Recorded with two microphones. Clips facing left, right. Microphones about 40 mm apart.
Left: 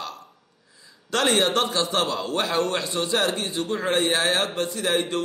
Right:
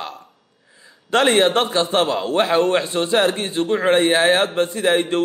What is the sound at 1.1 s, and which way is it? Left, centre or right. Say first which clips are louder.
A man's voice: right 6 dB; right.